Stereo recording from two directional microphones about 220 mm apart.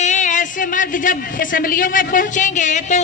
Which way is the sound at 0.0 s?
35° left (ahead or behind).